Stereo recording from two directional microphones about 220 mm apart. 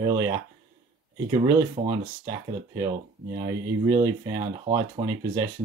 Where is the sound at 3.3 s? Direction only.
15° right (ahead or behind).